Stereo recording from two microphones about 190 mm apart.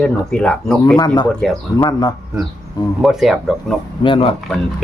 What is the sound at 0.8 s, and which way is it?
Speech, 20° left (ahead or behind).